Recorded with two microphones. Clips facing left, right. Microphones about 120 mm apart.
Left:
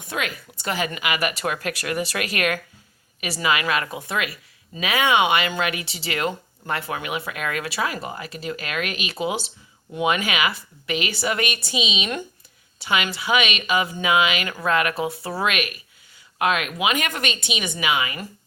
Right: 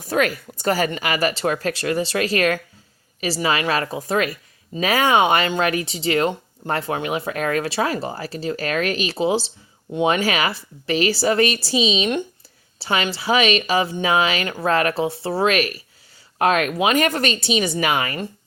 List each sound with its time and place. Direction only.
0.0 s speech: 40° right (ahead or behind)